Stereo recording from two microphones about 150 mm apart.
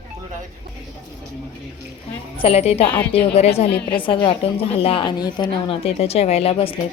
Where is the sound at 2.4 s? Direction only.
40° left (ahead or behind).